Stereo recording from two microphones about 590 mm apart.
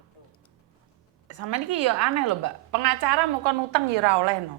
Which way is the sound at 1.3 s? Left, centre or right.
Right.